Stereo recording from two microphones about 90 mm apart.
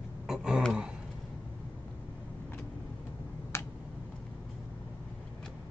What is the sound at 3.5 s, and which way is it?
Tick-tock, 30° left (ahead or behind).